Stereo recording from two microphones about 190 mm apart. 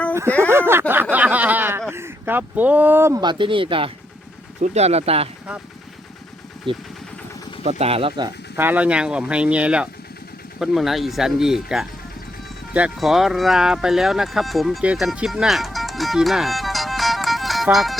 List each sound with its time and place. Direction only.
0.3 s a sound: 10° left (ahead or behind)
0.7 s a sound: 10° right (ahead or behind)
1.1 s snicker: 10° right (ahead or behind)
1.9 s speech: 10° right (ahead or behind); by 5.3 s 30° right (ahead or behind)
6.7 s speech: 25° right (ahead or behind)
8.5 s speech: 10° right (ahead or behind)